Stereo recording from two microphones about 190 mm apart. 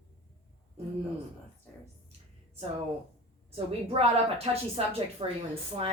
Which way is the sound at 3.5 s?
30° right (ahead or behind).